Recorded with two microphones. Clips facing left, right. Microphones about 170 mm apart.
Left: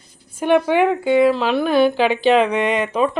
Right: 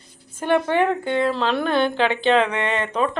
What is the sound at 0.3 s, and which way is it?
A woman's voice, 15° left (ahead or behind).